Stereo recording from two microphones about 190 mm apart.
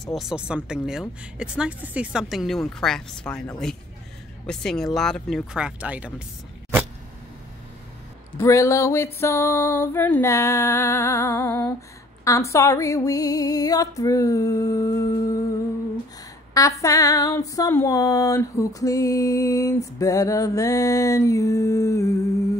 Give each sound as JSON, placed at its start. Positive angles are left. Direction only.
{"t": 0.0, "sound": "speech", "side_deg": 0}
{"t": 8.4, "sound": "female singing", "side_deg": 15}
{"t": 16.5, "sound": "female singing", "side_deg": 15}